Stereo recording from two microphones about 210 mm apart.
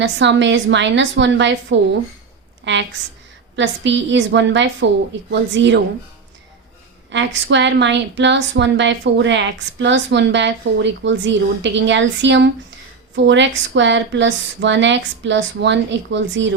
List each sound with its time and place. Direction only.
0.0 s a woman's voice: 55° right (ahead or behind)
2.7 s a woman's voice: 55° right (ahead or behind)
7.1 s a woman's voice: 60° right (ahead or behind)